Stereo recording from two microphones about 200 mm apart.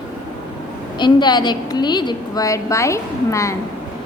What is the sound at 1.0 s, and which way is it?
A woman's voice, 20° left (ahead or behind).